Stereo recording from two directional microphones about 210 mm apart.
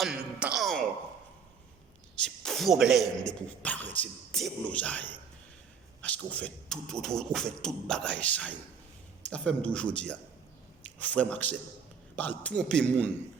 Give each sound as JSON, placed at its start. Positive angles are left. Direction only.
{"t": 0.3, "sound": "a man's voice", "side_deg": -5}
{"t": 2.4, "sound": "a man's voice", "side_deg": 0}